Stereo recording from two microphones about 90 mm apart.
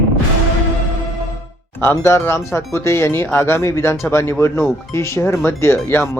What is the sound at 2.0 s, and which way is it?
Speech, 30° left (ahead or behind).